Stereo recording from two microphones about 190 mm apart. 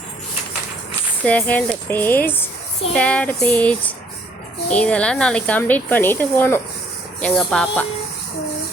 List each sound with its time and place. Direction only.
1.2 s speech: 5° left (ahead or behind)